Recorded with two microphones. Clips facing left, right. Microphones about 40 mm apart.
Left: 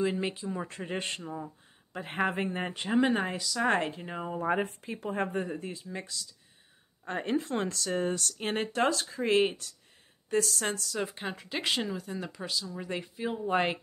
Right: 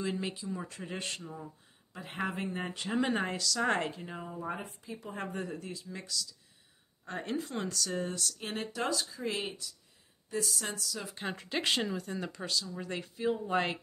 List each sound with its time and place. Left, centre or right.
0.0 s speech: left
2.0 s speech: left
3.1 s speech: centre
3.8 s speech: left
4.3 s speech: left
5.1 s speech: left
10.3 s speech: left
11.1 s speech: centre